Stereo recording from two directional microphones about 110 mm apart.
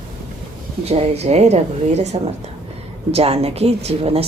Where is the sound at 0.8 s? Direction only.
70° right (ahead or behind); by 2.2 s 85° right.